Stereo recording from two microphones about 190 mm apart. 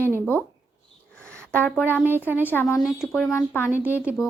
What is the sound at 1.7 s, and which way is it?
Speech, 5° right (ahead or behind).